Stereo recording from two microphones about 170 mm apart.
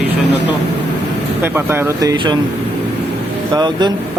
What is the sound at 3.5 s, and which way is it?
Speech, 25° right (ahead or behind).